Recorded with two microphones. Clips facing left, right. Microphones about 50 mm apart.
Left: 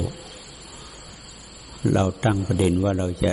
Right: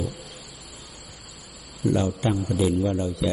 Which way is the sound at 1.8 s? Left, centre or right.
Left.